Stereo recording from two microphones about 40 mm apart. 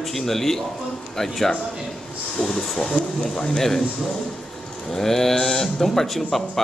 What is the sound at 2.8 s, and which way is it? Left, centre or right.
Speech, left.